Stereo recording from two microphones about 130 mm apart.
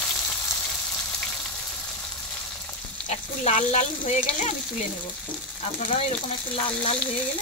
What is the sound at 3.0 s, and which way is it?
Speech, 65° left (ahead or behind).